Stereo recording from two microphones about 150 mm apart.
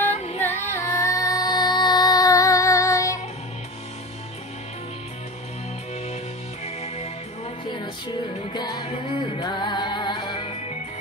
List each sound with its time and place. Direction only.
0.1 s music: 45° left (ahead or behind)
0.4 s child singing: 15° left (ahead or behind)
6.6 s music: 45° left (ahead or behind)
8.5 s music: 30° left (ahead or behind)